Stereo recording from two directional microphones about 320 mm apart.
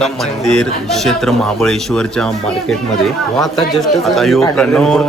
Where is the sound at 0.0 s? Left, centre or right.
Centre.